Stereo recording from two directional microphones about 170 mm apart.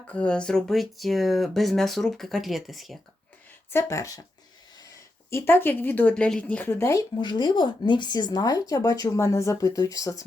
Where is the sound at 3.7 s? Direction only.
15° left (ahead or behind).